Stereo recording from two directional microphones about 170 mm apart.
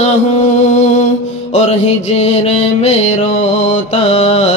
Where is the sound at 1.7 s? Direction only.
40° left (ahead or behind).